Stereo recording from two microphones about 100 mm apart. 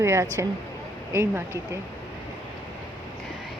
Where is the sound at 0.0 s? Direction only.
30° right (ahead or behind).